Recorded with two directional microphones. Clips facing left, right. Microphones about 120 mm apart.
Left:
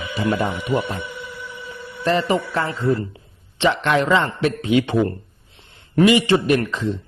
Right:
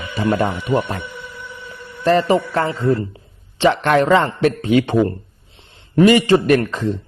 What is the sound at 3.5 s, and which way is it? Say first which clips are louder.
A man's voice: right 4 dB; 45° right (ahead or behind).